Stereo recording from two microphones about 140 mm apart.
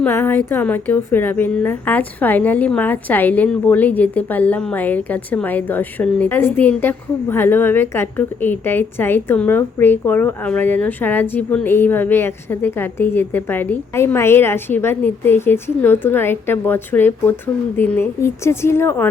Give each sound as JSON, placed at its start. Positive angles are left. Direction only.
{"t": 0.0, "sound": "a woman's voice", "side_deg": 15}